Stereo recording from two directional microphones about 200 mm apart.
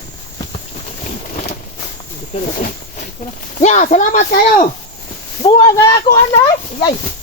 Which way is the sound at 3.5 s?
35° left (ahead or behind).